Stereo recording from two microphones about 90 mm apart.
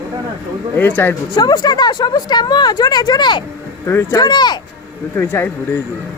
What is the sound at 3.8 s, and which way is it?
Speech, 30° left (ahead or behind).